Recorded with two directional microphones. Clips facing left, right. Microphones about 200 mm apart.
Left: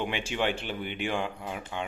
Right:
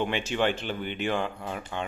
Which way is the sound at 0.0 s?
10° left (ahead or behind).